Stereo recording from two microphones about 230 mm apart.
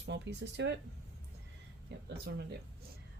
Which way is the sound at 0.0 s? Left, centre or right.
Right.